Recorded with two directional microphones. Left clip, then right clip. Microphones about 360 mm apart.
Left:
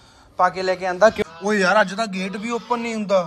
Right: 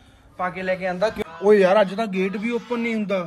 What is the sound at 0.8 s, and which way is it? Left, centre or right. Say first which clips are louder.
Speech: left 7 dB; left.